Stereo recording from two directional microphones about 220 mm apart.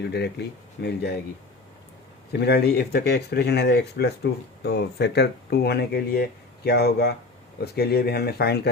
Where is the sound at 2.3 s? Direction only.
50° left (ahead or behind).